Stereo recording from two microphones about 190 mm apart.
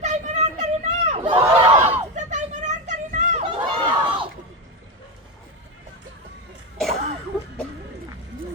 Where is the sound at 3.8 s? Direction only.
25° right (ahead or behind).